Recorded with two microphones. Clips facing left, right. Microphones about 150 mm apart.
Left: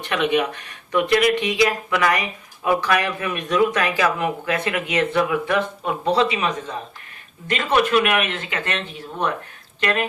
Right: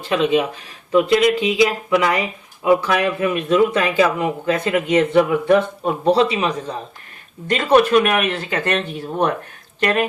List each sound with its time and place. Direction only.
0.1 s speech: 25° right (ahead or behind); by 9.3 s 45° right (ahead or behind)